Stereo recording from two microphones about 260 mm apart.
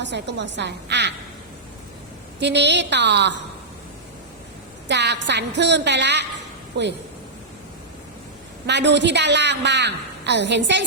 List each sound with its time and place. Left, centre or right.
0.0 s a woman's voice: right
2.4 s a woman's voice: right
4.9 s a woman's voice: right
8.6 s a woman's voice: right